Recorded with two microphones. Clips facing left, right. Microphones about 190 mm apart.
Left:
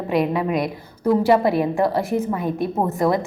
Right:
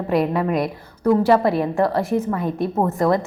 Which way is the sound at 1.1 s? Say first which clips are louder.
Right 1 dB; 10° left (ahead or behind).